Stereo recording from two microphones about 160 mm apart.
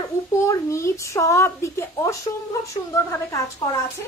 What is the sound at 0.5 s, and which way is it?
A woman's voice, 15° left (ahead or behind).